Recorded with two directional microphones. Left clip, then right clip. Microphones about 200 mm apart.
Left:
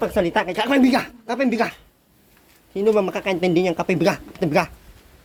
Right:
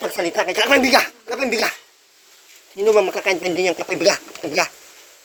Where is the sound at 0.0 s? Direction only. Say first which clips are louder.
Left 1 dB; 5° right (ahead or behind).